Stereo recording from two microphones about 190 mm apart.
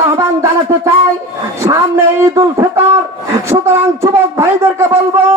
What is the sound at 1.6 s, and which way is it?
Speech, 15° right (ahead or behind).